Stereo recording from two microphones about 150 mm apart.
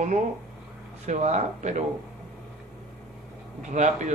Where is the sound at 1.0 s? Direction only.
50° right (ahead or behind).